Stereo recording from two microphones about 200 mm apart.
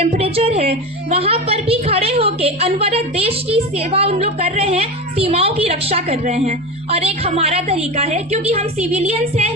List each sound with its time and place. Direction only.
0.0 s a woman's voice: 30° right (ahead or behind)